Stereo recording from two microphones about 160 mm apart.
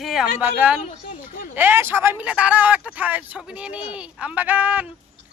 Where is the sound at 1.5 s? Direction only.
10° right (ahead or behind).